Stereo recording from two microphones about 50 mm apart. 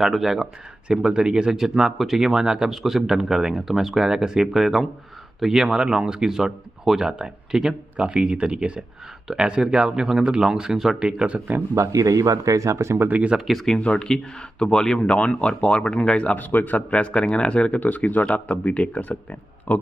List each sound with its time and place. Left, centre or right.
0.0 s speech: centre
11.7 s speech: right
13.1 s speech: right
13.5 s speech: centre
13.7 s speech: left
14.0 s speech: centre
16.3 s speech: left
16.9 s speech: centre
17.7 s speech: left
19.7 s speech: left